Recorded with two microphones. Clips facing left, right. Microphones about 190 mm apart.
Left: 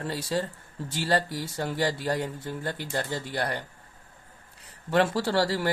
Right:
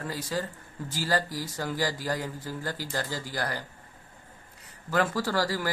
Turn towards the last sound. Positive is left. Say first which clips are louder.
# left 3 dB
turn(degrees=25)  # may be behind; listen again after turning